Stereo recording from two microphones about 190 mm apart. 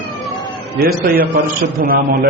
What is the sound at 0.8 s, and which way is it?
Speech, 50° right (ahead or behind).